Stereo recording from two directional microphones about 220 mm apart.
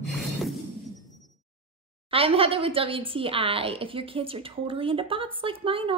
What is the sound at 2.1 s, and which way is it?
A woman's voice, 25° right (ahead or behind).